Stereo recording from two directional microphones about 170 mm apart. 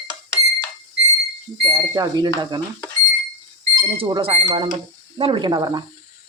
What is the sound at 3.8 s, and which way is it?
Speech, 25° right (ahead or behind).